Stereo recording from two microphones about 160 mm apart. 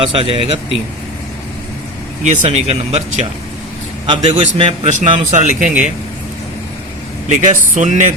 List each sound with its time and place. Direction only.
0.1 s speech: 35° right (ahead or behind)
2.2 s speech: 45° right (ahead or behind)
7.3 s speech: 50° right (ahead or behind)